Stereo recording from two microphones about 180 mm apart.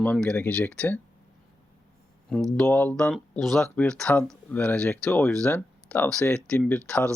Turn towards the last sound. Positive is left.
turn(degrees=5)  # may be behind; listen again after turning